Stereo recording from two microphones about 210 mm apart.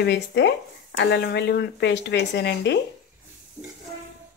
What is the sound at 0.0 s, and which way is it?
Speech, 55° left (ahead or behind).